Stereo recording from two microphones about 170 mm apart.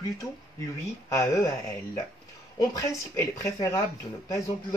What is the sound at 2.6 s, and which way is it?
Speech, 15° left (ahead or behind).